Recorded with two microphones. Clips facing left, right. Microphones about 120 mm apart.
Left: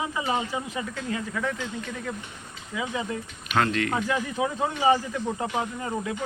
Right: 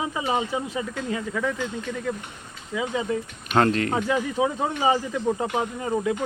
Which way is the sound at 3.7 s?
35° right (ahead or behind).